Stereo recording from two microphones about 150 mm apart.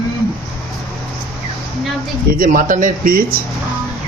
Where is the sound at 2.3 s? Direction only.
65° right (ahead or behind).